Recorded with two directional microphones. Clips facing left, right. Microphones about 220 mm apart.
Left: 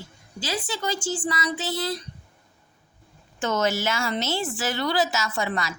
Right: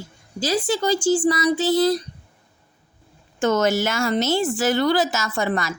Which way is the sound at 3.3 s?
45° right (ahead or behind).